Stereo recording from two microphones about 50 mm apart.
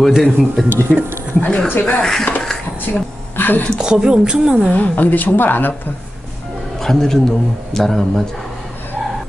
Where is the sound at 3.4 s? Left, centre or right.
Left.